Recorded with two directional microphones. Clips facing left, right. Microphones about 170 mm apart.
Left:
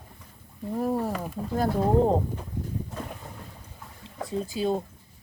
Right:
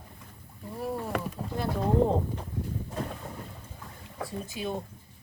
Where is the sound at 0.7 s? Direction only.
40° left (ahead or behind).